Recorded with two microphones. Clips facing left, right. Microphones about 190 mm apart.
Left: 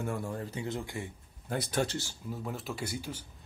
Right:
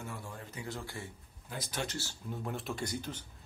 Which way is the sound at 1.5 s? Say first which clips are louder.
Left 8 dB; 55° left (ahead or behind).